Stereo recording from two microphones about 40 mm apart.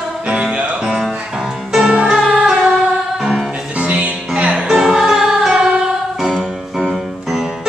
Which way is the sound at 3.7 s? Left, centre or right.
Right.